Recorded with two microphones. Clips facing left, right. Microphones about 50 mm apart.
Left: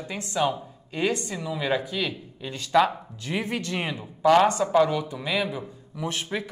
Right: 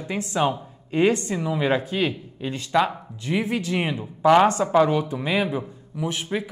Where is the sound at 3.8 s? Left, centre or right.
Centre.